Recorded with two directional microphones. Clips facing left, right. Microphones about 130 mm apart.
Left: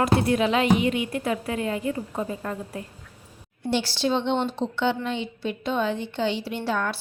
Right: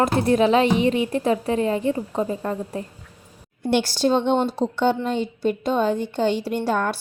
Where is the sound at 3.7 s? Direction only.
45° right (ahead or behind).